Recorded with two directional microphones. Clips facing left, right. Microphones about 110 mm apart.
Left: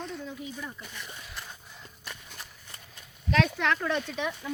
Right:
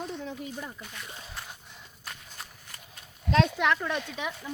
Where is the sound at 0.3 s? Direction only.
60° right (ahead or behind).